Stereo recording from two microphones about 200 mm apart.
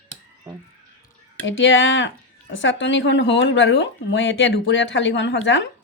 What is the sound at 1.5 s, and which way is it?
Speech, 70° left (ahead or behind).